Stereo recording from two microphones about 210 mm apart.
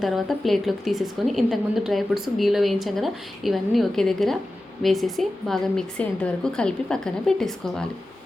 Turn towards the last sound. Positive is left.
turn(degrees=5)  # may be behind; listen again after turning